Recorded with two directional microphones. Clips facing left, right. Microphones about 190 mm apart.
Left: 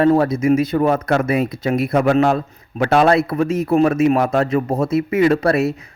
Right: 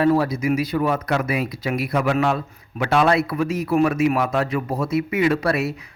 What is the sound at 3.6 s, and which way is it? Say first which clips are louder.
Speech: left 4 dB; 25° left (ahead or behind).